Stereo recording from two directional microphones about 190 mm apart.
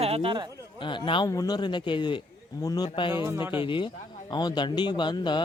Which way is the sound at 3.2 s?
15° right (ahead or behind).